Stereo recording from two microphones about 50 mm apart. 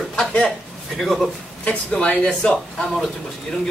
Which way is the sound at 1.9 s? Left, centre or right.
Left.